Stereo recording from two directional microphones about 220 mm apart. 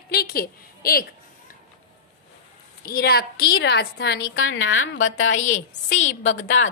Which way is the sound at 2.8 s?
45° left (ahead or behind).